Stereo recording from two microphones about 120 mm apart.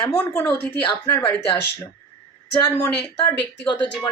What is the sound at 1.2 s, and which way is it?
Speech, 45° left (ahead or behind).